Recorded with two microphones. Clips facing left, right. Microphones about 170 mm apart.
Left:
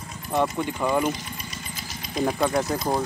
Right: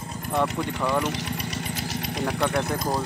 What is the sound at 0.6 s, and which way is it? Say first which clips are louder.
Speech: left 1 dB; 75° right (ahead or behind).